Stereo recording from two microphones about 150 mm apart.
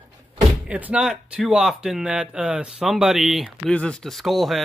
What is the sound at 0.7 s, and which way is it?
Speech, 10° right (ahead or behind).